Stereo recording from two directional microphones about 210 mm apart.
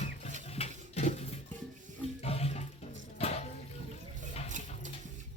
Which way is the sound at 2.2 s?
30° left (ahead or behind).